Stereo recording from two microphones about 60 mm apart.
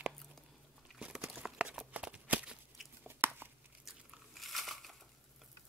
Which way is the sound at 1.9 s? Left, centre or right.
Centre.